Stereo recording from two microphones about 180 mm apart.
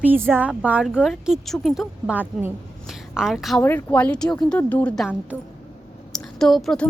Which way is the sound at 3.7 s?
10° left (ahead or behind).